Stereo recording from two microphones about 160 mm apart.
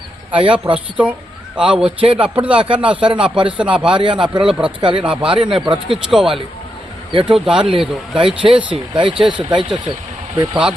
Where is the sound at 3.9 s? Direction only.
30° right (ahead or behind).